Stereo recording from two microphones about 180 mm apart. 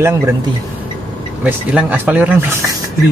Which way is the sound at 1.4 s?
10° right (ahead or behind).